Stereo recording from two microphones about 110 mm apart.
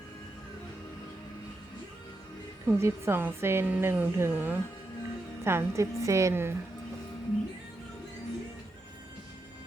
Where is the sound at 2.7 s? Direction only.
25° right (ahead or behind).